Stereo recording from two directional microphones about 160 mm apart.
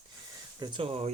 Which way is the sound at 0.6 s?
30° right (ahead or behind).